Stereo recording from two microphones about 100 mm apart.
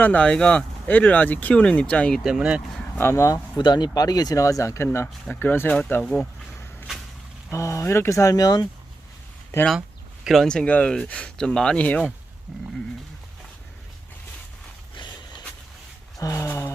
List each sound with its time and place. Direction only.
0.0 s speech: 15° left (ahead or behind)
2.2 s speech: 5° right (ahead or behind)
3.0 s speech: 25° left (ahead or behind)
3.6 s speech: 45° left (ahead or behind); by 4.9 s 30° left (ahead or behind)
5.3 s speech: 20° left (ahead or behind)
6.0 s speech: 5° left (ahead or behind)
7.5 s speech: 30° left (ahead or behind)
10.2 s speech: 5° left (ahead or behind)
12.5 s speech: centre (ahead or behind)
14.9 s a sound: 50° left (ahead or behind)
16.1 s a sound: 30° left (ahead or behind)